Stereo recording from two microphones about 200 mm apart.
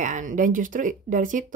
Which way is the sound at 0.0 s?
40° right (ahead or behind).